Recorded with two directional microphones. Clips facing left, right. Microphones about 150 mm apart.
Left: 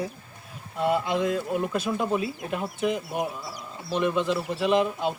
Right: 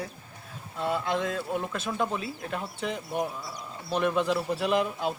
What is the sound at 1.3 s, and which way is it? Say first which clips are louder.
Speech: left 4 dB; 15° left (ahead or behind).